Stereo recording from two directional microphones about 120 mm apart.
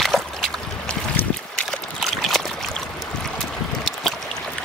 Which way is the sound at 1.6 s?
Centre (ahead or behind).